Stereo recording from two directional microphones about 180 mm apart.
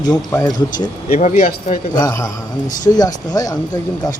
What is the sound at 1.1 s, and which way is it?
Speech, 50° left (ahead or behind).